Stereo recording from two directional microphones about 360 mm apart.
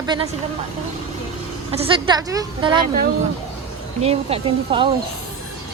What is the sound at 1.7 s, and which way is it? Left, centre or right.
A woman's voice, centre.